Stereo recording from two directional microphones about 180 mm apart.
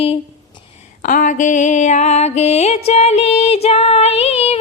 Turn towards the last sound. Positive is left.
turn(degrees=35)  # may be behind; listen again after turning